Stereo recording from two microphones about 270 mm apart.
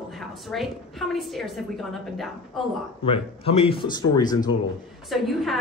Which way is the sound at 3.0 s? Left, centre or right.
Left.